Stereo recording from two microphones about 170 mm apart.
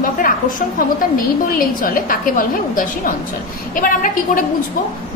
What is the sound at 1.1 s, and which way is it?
A woman's voice, 55° left (ahead or behind).